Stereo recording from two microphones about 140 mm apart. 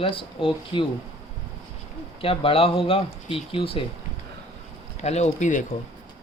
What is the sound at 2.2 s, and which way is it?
Speech, 40° left (ahead or behind).